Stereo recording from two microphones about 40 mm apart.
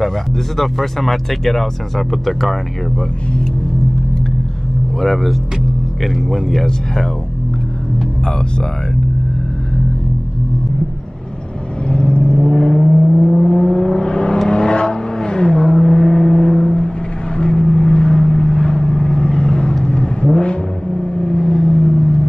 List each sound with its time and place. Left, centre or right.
0.6 s speech: centre
5.0 s speech: centre
11.9 s vehicle: left
12.4 s vehicle: centre